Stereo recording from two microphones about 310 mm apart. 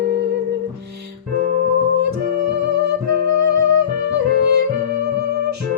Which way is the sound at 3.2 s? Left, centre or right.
Right.